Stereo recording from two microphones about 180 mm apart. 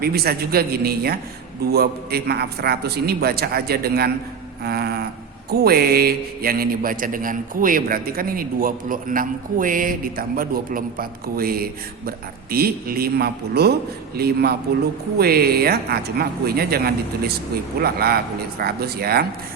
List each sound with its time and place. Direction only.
0.0 s a man's voice: 60° right (ahead or behind)